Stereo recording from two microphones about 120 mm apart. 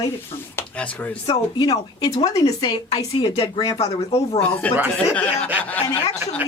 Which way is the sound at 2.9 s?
50° left (ahead or behind).